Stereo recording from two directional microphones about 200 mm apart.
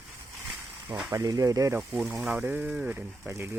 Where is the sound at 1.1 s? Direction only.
15° right (ahead or behind).